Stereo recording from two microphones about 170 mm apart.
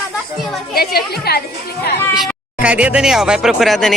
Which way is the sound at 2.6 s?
5° right (ahead or behind).